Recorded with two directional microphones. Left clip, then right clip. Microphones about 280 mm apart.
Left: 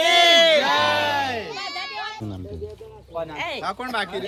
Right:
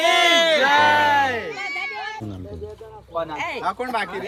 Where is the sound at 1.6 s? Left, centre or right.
Centre.